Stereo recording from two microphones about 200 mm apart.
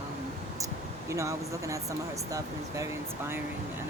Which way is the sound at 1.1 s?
15° right (ahead or behind).